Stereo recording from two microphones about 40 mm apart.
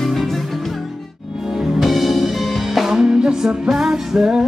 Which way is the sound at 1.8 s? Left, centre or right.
Centre.